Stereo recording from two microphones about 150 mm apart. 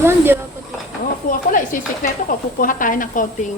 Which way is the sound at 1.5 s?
65° left (ahead or behind).